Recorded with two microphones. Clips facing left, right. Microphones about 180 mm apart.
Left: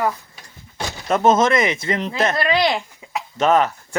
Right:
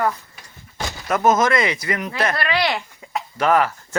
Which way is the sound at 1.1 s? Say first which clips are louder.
Left 2 dB; 25° left (ahead or behind).